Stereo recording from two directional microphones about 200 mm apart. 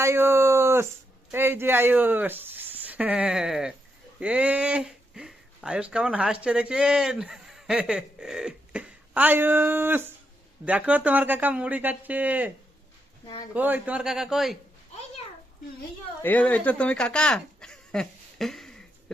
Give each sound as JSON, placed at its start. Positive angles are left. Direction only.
{"t": 0.0, "sound": "a sound", "side_deg": -15}
{"t": 1.3, "sound": "speech", "side_deg": -10}
{"t": 13.2, "sound": "speech", "side_deg": 20}
{"t": 13.5, "sound": "a man's voice", "side_deg": -10}
{"t": 16.2, "sound": "speech", "side_deg": 10}